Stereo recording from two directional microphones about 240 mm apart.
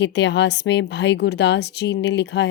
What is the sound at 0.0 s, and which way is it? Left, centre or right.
Speech, left.